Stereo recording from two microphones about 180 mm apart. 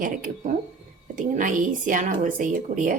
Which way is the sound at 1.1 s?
45° right (ahead or behind).